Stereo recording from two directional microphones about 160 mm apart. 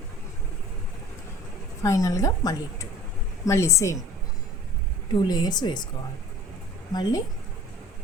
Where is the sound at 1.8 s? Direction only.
20° left (ahead or behind).